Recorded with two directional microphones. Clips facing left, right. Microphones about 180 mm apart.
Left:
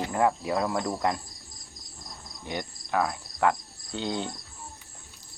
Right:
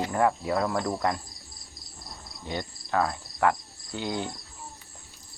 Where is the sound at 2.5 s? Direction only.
15° left (ahead or behind).